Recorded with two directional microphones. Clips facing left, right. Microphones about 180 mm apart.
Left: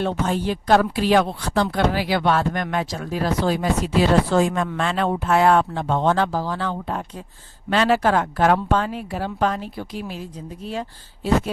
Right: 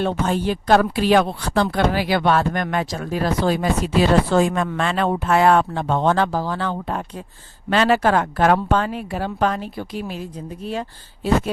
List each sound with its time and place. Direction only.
0.0 s speech: 60° right (ahead or behind)